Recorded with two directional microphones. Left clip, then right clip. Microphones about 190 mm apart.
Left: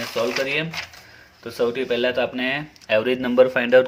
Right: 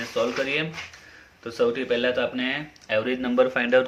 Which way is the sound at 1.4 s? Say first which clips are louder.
Left 1 dB; 35° left (ahead or behind).